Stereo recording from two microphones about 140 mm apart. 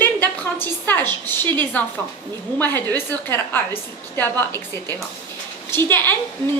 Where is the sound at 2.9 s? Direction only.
25° right (ahead or behind).